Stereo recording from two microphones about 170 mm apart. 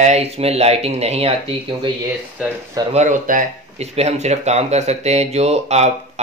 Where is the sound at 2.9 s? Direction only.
45° right (ahead or behind).